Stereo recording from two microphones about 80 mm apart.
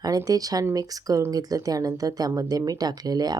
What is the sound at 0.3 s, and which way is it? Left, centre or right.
A woman's voice, right.